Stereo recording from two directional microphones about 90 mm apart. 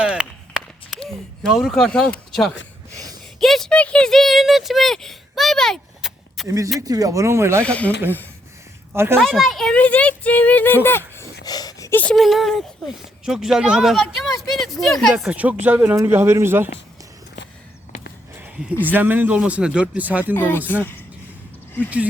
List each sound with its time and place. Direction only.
0.0 s run: 10° right (ahead or behind)
1.5 s speech: 5° right (ahead or behind)
1.9 s speech: 10° left (ahead or behind)
6.0 s a sound: 5° right (ahead or behind)
6.7 s speech: 45° right (ahead or behind)
7.6 s speech: 15° left (ahead or behind)
9.1 s speech: 5° left (ahead or behind)
9.7 s speech: 15° left (ahead or behind)
11.4 s a sound: 45° left (ahead or behind)
12.1 s speech: centre (ahead or behind)
15.3 s a man's voice: 15° right (ahead or behind)
16.0 s a man's voice: 30° right (ahead or behind)
18.9 s speech: 20° right (ahead or behind)
20.3 s speech: 25° left (ahead or behind)